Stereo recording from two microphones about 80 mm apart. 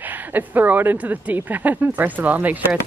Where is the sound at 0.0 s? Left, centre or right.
Right.